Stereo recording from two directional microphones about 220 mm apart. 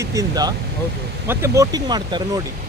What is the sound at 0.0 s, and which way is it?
Speech, 15° right (ahead or behind).